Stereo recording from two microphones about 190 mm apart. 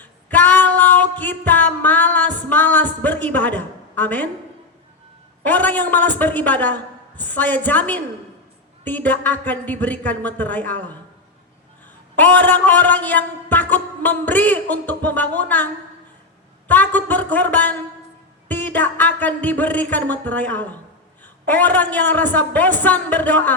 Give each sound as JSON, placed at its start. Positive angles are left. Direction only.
{"t": 0.0, "sound": "female singing", "side_deg": 10}
{"t": 5.4, "sound": "a man's voice", "side_deg": 10}
{"t": 12.1, "sound": "a man's voice", "side_deg": 10}